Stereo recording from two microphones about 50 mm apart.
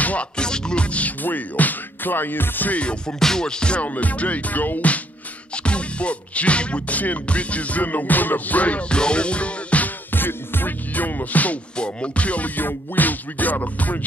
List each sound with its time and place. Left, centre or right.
0.0 s music: left
0.4 s music: centre; by 2.8 s left
2.8 s music: left
3.2 s music: centre
3.8 s music: left
10.1 s music: left
11.7 s music: left